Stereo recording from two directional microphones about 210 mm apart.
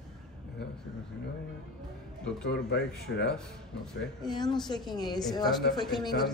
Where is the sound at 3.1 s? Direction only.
70° left (ahead or behind).